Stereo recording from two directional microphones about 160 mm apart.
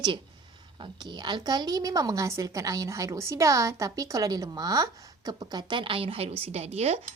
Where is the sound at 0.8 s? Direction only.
25° right (ahead or behind).